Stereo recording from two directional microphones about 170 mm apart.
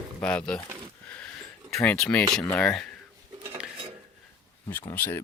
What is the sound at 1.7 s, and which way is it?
Speech, 5° left (ahead or behind).